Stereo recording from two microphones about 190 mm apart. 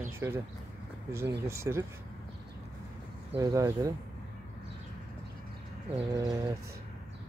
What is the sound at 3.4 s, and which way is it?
Speech, 15° right (ahead or behind).